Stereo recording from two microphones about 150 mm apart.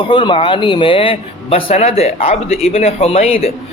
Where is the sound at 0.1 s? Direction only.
30° left (ahead or behind).